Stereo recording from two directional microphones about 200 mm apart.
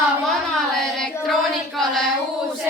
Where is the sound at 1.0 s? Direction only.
Centre (ahead or behind).